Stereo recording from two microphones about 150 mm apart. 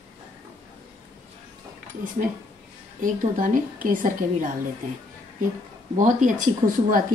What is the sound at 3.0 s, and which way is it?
A woman's voice, 60° right (ahead or behind).